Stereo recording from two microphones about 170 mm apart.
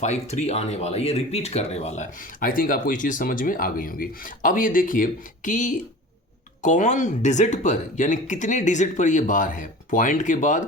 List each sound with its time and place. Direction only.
0.0 s speech: 40° left (ahead or behind)